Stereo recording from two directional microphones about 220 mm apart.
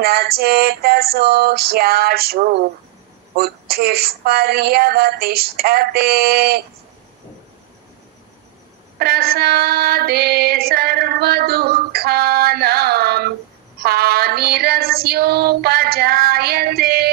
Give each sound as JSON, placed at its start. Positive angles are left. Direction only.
{"t": 0.0, "sound": "female singing", "side_deg": -45}
{"t": 8.9, "sound": "female singing", "side_deg": -45}